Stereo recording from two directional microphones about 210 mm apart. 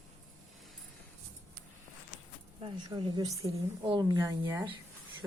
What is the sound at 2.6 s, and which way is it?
A woman's voice, 20° right (ahead or behind).